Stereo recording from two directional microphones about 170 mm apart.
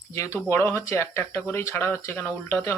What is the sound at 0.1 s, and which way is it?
A man's voice, 15° left (ahead or behind).